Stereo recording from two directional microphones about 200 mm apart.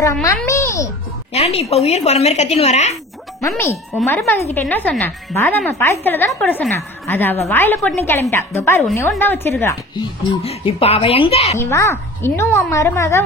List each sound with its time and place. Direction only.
0.0 s speech: 15° left (ahead or behind)
0.4 s babbling: 15° left (ahead or behind)
1.3 s a woman's voice: 30° left (ahead or behind)
3.3 s speech: 15° left (ahead or behind)
10.4 s a woman's voice: 30° left (ahead or behind)
11.6 s speech: 15° left (ahead or behind)